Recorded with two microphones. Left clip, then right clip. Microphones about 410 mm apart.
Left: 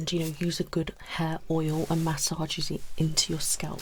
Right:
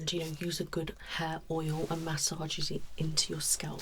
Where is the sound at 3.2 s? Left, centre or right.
Left.